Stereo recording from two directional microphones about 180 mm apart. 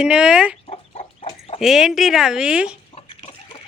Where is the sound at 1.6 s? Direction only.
Centre (ahead or behind).